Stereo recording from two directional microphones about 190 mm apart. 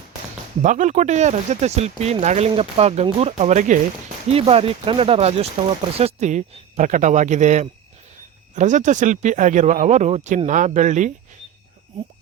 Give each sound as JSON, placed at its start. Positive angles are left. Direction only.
{"t": 0.6, "sound": "speech", "side_deg": -40}